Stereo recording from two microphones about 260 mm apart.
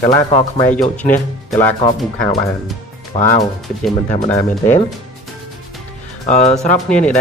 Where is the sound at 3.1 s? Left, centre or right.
Left.